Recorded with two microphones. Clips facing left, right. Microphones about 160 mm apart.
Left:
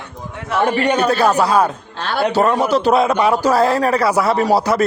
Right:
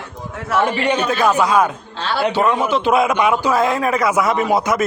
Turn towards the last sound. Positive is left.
turn(degrees=35)  # may be behind; listen again after turning